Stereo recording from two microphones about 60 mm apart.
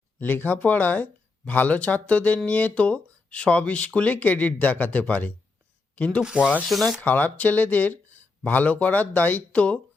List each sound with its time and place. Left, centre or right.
0.2 s speech: left
6.2 s rub: centre
6.7 s speech: centre
7.0 s speech: left